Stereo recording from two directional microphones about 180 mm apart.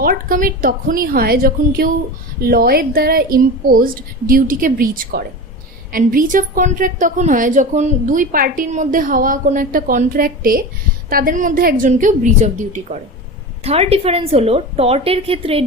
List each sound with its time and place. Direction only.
0.0 s a woman's voice: 55° right (ahead or behind); by 15.6 s 30° right (ahead or behind)